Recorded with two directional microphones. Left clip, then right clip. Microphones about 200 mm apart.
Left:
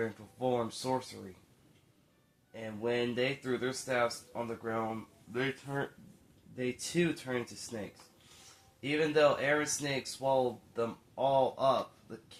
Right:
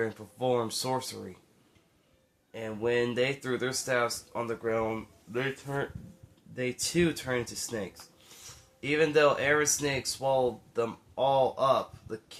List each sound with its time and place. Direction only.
0.0 s speech: 35° right (ahead or behind)
2.5 s speech: 35° right (ahead or behind)
8.8 s speech: 35° right (ahead or behind)